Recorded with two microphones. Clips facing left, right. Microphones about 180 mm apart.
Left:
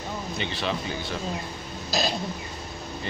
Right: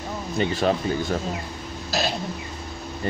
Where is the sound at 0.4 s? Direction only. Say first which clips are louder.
Right 9 dB; 45° right (ahead or behind).